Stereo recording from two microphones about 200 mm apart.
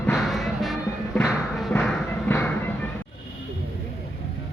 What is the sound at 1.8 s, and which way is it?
Music, 10° left (ahead or behind).